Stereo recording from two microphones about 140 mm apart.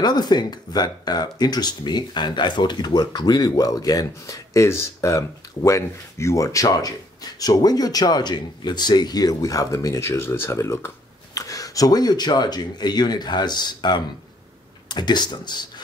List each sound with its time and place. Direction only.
0.0 s speech: 30° left (ahead or behind)